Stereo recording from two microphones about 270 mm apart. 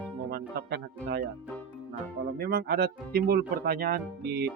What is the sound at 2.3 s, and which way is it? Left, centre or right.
Speech, right.